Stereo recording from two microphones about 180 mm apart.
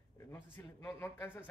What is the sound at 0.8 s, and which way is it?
Speech, 15° left (ahead or behind).